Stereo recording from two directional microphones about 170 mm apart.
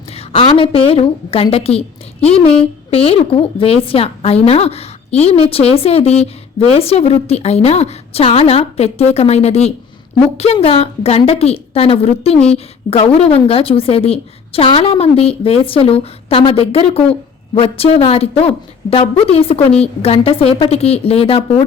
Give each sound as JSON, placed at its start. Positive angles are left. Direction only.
{"t": 0.2, "sound": "a woman's voice", "side_deg": 30}